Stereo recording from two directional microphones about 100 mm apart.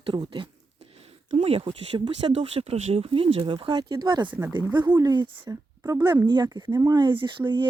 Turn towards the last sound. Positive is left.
turn(degrees=-55)  # may be behind; listen again after turning